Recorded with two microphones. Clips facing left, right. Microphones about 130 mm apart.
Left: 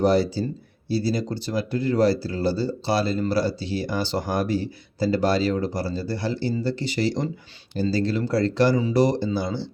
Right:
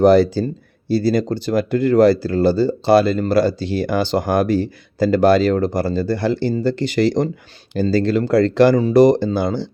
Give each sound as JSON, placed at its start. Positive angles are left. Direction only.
{"t": 0.0, "sound": "speech", "side_deg": -55}
{"t": 7.7, "sound": "speech", "side_deg": -65}